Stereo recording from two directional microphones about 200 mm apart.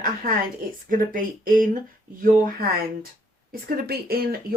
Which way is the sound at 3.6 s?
50° right (ahead or behind).